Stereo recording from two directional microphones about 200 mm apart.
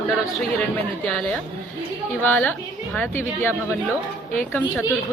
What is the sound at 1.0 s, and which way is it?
Speech, 5° left (ahead or behind).